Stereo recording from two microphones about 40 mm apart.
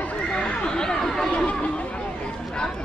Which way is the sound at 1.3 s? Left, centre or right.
Left.